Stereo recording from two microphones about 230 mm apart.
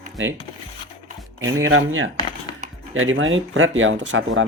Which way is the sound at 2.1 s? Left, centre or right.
Centre.